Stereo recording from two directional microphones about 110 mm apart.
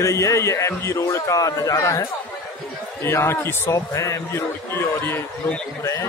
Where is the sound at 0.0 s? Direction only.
25° left (ahead or behind).